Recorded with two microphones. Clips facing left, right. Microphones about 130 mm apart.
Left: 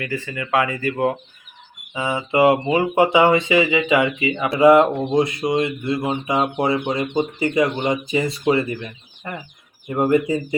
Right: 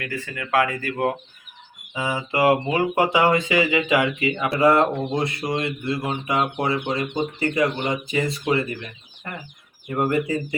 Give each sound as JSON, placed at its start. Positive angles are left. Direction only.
{"t": 0.0, "sound": "speech", "side_deg": 0}
{"t": 2.3, "sound": "speech", "side_deg": 5}
{"t": 4.6, "sound": "speech", "side_deg": 15}
{"t": 9.9, "sound": "speech", "side_deg": 20}